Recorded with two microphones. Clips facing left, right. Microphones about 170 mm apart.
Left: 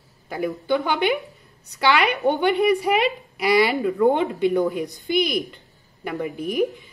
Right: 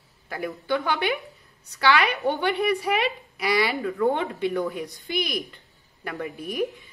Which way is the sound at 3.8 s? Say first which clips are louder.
Left 5 dB; 15° left (ahead or behind).